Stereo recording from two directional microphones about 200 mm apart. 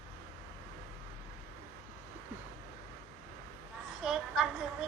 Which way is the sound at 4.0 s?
5° right (ahead or behind).